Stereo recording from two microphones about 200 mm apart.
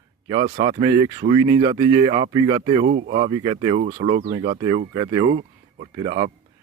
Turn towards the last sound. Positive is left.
turn(degrees=-25)  # may be behind; listen again after turning